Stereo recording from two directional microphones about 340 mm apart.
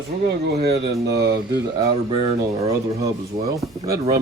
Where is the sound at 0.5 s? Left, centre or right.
Right.